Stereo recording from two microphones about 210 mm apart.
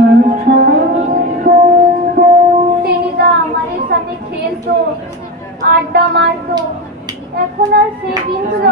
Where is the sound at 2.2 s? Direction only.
50° right (ahead or behind).